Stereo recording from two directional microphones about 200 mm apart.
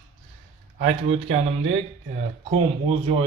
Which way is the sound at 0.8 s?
35° right (ahead or behind).